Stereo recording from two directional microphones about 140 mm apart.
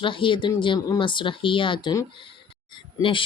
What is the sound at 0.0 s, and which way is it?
Speech, 35° left (ahead or behind).